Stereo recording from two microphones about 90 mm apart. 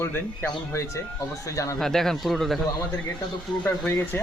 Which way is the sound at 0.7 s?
35° left (ahead or behind).